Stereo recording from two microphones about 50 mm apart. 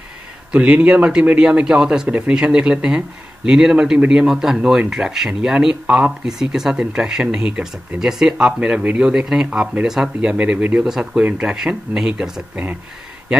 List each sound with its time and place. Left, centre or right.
0.5 s speech: right
6.2 s speech: centre
8.4 s speech: right
9.1 s speech: centre
10.3 s speech: right
10.9 s speech: centre